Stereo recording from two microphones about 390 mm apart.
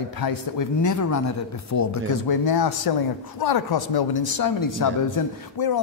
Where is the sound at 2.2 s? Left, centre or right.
Left.